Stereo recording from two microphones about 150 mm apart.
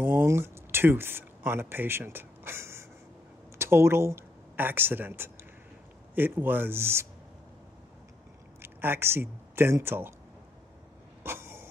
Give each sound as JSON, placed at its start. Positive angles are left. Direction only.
{"t": 0.0, "sound": "speech", "side_deg": -15}
{"t": 8.5, "sound": "speech", "side_deg": -15}
{"t": 11.2, "sound": "vehicle", "side_deg": -15}